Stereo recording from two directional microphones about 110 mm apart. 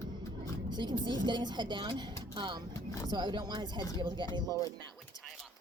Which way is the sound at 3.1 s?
45° right (ahead or behind).